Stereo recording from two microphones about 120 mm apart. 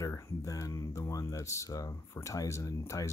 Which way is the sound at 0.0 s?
25° left (ahead or behind).